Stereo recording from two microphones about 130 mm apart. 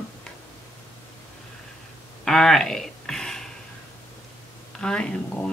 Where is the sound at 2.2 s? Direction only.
5° left (ahead or behind).